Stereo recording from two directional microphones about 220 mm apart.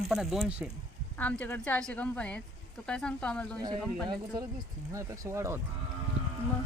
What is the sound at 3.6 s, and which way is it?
Speech, 20° right (ahead or behind).